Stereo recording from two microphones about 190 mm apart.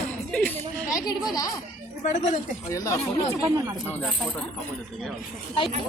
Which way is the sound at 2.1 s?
40° left (ahead or behind).